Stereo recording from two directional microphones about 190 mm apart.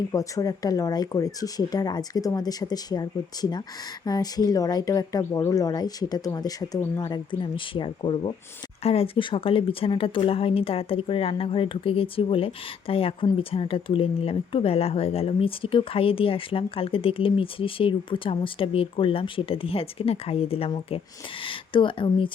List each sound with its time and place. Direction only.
0.1 s speech: 20° left (ahead or behind)